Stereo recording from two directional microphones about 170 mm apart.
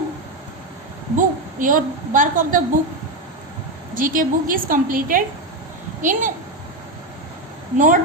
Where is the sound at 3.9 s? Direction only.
55° right (ahead or behind).